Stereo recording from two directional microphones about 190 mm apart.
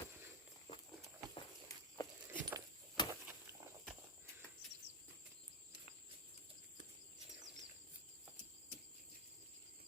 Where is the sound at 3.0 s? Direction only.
25° left (ahead or behind).